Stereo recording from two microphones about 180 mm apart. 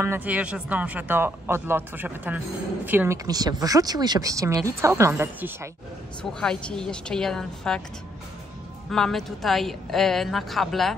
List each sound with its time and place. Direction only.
0.0 s speech: 10° right (ahead or behind)
3.3 s speech: 20° right (ahead or behind)
6.4 s a woman's voice: 5° left (ahead or behind)
8.9 s a woman's voice: centre (ahead or behind)